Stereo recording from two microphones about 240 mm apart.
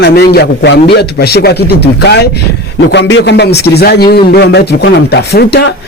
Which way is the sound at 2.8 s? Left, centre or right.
Left.